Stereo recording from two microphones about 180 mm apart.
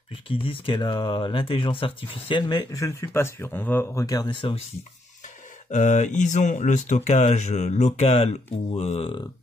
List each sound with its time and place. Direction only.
0.3 s speech: 30° left (ahead or behind)
5.7 s speech: 40° left (ahead or behind)